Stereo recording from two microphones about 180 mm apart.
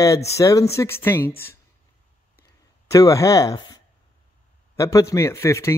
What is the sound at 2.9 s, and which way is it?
Speech, 20° left (ahead or behind).